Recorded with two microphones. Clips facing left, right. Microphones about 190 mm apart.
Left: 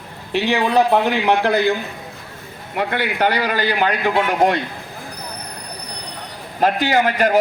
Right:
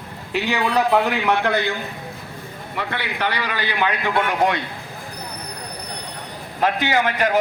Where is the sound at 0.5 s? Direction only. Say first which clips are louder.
Left 2 dB; 30° left (ahead or behind).